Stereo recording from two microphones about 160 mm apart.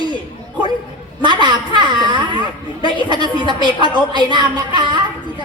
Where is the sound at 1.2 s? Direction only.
25° right (ahead or behind).